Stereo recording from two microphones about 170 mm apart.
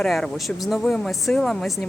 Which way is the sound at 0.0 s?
Centre (ahead or behind).